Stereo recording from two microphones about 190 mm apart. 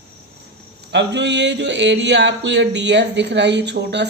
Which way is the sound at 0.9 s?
65° right (ahead or behind).